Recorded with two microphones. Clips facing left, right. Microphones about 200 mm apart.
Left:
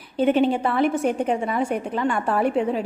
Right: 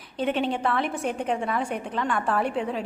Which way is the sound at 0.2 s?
5° left (ahead or behind).